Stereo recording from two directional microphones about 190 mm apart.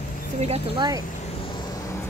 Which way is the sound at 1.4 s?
25° left (ahead or behind).